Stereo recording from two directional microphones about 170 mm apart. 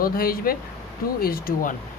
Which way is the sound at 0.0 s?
60° left (ahead or behind).